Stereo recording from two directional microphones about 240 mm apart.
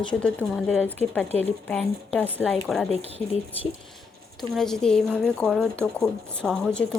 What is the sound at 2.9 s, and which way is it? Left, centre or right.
Speech, right.